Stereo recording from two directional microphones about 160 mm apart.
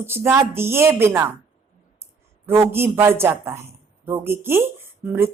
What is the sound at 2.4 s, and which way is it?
Speech, 15° right (ahead or behind).